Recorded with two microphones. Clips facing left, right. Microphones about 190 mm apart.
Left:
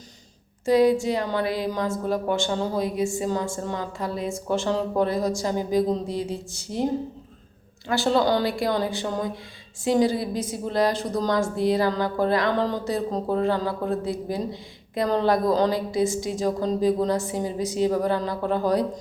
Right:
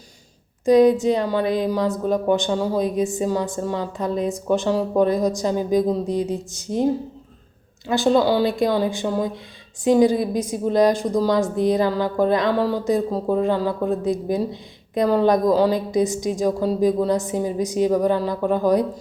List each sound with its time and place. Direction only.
0.6 s a woman's voice: 20° right (ahead or behind)
7.9 s speech: 15° right (ahead or behind)